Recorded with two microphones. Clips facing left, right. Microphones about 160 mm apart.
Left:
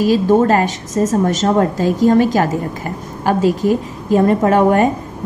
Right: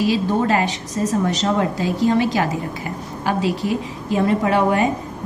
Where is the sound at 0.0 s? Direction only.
45° left (ahead or behind).